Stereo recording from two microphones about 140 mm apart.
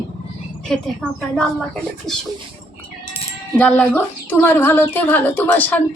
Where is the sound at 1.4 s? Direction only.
5° left (ahead or behind).